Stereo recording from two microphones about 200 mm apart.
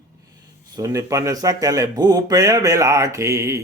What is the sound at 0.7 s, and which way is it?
Speech, 15° right (ahead or behind).